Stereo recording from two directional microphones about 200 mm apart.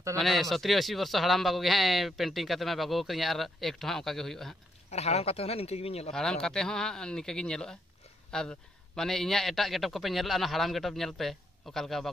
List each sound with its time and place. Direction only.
0.2 s speech: centre (ahead or behind)
4.9 s speech: 30° left (ahead or behind)
6.1 s speech: 5° left (ahead or behind)